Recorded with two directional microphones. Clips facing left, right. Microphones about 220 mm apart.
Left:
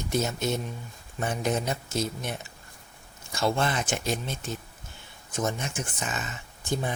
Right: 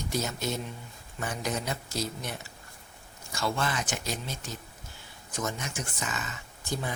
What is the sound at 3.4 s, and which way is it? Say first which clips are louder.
Speech: left 4 dB; 25° left (ahead or behind).